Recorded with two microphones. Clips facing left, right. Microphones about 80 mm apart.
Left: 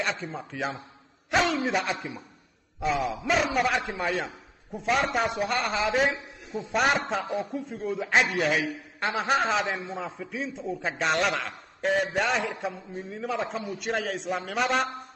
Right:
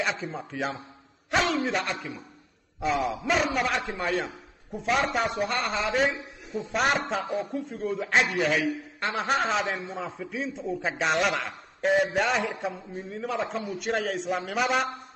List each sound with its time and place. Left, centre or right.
0.0 s a man's voice: centre